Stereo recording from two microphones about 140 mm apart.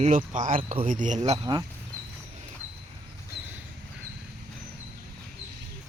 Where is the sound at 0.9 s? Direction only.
65° right (ahead or behind).